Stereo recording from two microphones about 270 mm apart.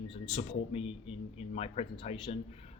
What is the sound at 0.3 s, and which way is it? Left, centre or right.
Speech, left.